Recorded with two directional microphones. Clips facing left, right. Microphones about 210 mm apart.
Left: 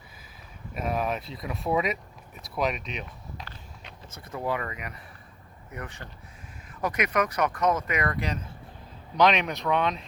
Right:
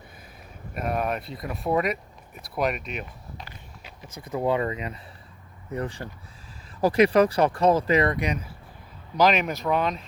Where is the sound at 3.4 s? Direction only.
15° right (ahead or behind).